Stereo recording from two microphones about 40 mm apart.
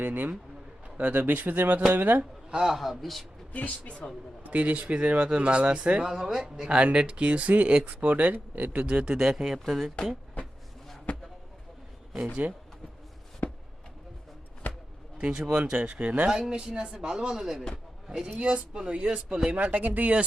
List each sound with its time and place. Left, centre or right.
0.0 s speech: right
2.5 s a man's voice: centre
3.5 s speech: left
4.4 s speech: right
6.1 s speech: centre
6.7 s speech: right
9.4 s a man's voice: centre
11.1 s a sound: left
12.4 s speech: right
13.4 s chopping: left
14.6 s music: left
15.2 s speech: right
16.5 s speech: right
19.5 s speech: right